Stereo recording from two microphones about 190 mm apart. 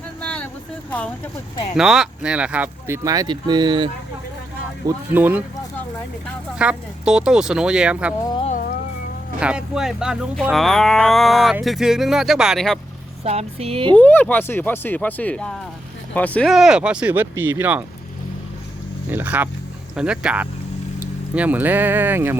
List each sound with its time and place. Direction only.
0.2 s a sound: 5° left (ahead or behind)
1.7 s speech: centre (ahead or behind); by 3.8 s 25° right (ahead or behind)
4.9 s speech: 10° right (ahead or behind)
6.6 s speech: 5° right (ahead or behind)
9.4 s speech: 5° right (ahead or behind)
13.2 s speech: 35° right (ahead or behind)
13.9 s speech: 10° left (ahead or behind); by 17.8 s 10° right (ahead or behind)
19.1 s speech: 10° right (ahead or behind)